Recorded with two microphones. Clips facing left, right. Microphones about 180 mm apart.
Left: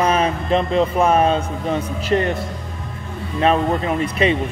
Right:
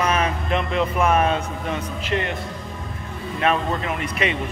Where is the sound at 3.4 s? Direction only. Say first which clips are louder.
Left 5 dB; 35° left (ahead or behind).